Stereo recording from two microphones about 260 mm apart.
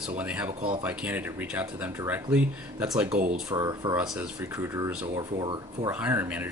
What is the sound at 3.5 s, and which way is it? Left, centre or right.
Speech, centre.